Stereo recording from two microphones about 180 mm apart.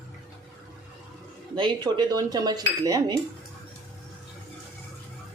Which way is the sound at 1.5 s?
25° right (ahead or behind).